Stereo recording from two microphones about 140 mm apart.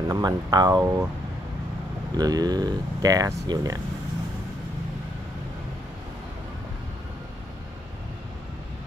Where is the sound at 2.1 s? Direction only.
25° right (ahead or behind).